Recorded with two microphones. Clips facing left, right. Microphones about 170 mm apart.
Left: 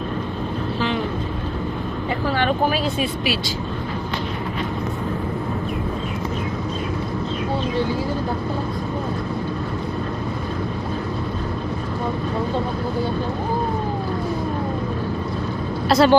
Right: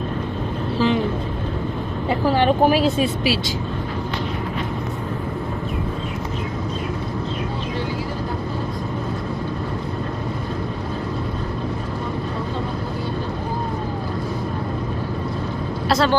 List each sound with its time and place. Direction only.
2.3 s speech: 30° right (ahead or behind)
15.9 s speech: centre (ahead or behind)